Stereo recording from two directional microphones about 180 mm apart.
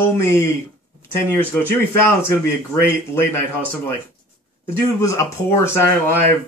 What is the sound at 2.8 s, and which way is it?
Speech, 15° left (ahead or behind).